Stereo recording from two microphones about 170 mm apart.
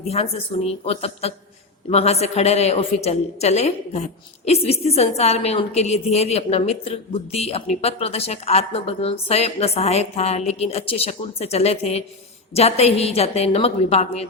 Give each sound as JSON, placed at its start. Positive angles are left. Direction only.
{"t": 0.1, "sound": "a woman's voice", "side_deg": 40}